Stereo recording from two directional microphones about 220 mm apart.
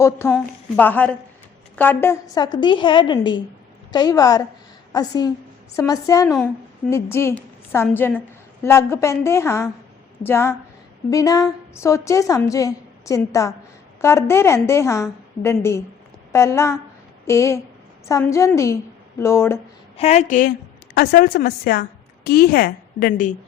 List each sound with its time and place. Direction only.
0.0 s a woman's voice: 10° left (ahead or behind)
6.2 s a woman's voice: 5° left (ahead or behind)
20.0 s a woman's voice: 30° left (ahead or behind)